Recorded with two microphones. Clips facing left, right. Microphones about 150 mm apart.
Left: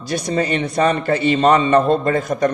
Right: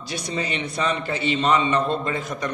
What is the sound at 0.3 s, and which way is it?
A man's voice, 45° left (ahead or behind).